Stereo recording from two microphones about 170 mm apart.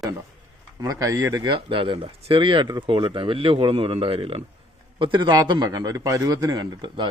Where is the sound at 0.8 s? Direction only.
20° right (ahead or behind).